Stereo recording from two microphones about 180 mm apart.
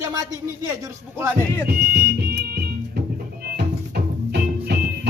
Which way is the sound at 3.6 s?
60° right (ahead or behind).